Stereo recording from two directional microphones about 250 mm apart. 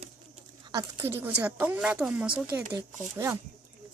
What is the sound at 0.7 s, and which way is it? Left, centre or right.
A woman's voice, centre.